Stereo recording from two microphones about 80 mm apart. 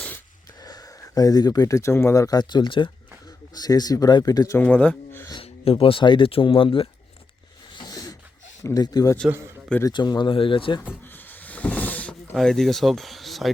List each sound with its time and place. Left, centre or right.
0.6 s speech: left
2.4 s speech: left
3.5 s speech: left
4.6 s speech: centre
5.9 s speech: left
7.8 s a sound: left
8.6 s speech: left
9.9 s speech: left
11.1 s a sound: left
12.4 s speech: centre